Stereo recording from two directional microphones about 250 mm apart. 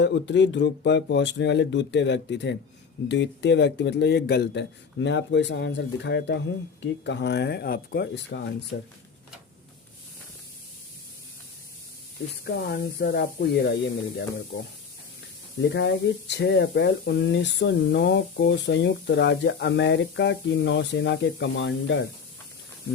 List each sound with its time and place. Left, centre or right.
0.0 s speech: left
12.5 s speech: left
15.7 s speech: left